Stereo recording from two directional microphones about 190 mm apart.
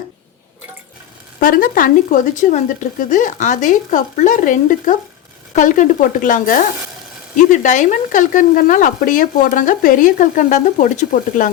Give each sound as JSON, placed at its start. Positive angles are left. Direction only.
{"t": 1.4, "sound": "speech", "side_deg": 50}